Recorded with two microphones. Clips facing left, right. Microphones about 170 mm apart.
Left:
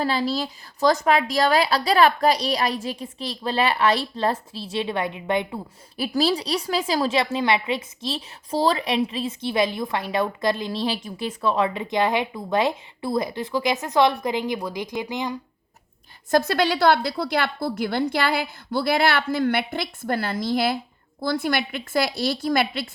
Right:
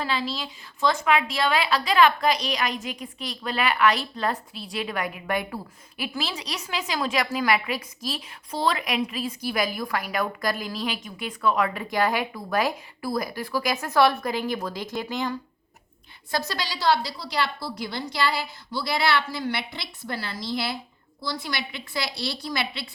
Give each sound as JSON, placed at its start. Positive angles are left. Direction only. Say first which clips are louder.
{"t": 0.0, "sound": "a woman's voice", "louder": "left 5 dB", "side_deg": 40}
{"t": 6.0, "sound": "a woman's voice", "louder": "left 9 dB", "side_deg": 35}
{"t": 16.3, "sound": "a woman's voice", "louder": "left 10 dB", "side_deg": 55}